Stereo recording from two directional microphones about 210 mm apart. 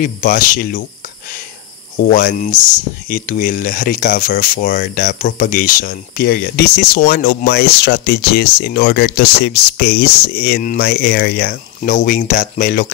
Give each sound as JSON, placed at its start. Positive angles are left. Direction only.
{"t": 0.0, "sound": "speech", "side_deg": 40}
{"t": 2.1, "sound": "speech", "side_deg": 40}